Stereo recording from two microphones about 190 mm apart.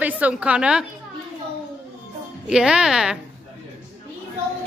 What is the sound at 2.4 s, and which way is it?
Speech, 5° right (ahead or behind).